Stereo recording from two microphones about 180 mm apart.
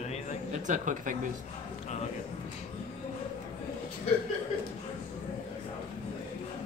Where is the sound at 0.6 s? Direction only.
45° right (ahead or behind).